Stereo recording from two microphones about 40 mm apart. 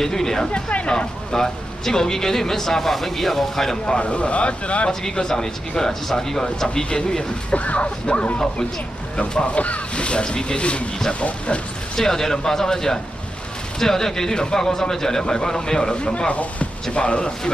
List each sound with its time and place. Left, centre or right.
0.0 s speech: centre
0.6 s speech: left
1.3 s speech: centre
3.8 s speech: left
5.0 s speech: centre
7.5 s speech: left
9.6 s speech: left
11.9 s speech: centre
16.3 s speech: left
16.9 s speech: left